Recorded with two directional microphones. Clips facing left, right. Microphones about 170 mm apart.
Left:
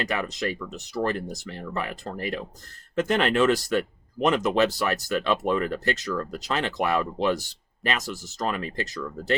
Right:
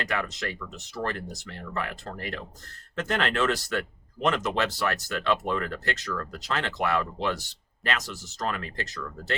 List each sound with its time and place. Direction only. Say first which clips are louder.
0.1 s speech: left 3 dB; 15° left (ahead or behind)